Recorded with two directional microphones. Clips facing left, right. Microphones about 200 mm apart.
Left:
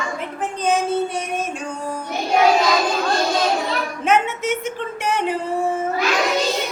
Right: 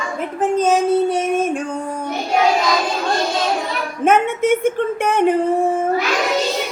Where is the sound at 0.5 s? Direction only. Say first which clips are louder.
Right 5 dB; 45° right (ahead or behind).